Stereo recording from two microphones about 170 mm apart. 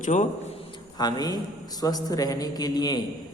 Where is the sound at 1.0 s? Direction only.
25° left (ahead or behind).